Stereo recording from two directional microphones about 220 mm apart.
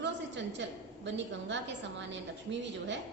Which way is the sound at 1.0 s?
55° right (ahead or behind).